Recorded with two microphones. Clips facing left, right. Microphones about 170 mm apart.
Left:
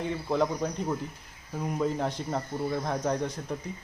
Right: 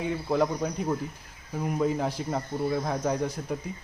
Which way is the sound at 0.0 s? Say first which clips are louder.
Right 2 dB; 5° right (ahead or behind).